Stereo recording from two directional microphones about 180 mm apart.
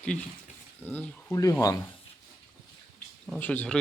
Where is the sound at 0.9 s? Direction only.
10° left (ahead or behind).